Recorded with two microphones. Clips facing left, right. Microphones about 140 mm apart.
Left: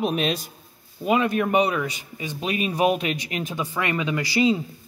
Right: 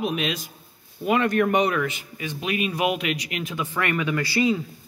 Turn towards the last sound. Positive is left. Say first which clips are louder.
# left 1 dB
turn(degrees=20)  # may be behind; listen again after turning